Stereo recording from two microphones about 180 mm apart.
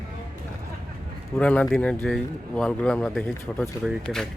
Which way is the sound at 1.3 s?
10° left (ahead or behind).